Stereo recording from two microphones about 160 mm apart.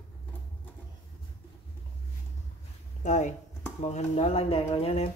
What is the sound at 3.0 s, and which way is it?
Speech, 45° left (ahead or behind).